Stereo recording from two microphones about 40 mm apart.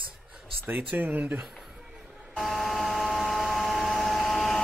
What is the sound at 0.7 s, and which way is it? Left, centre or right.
Speech, right.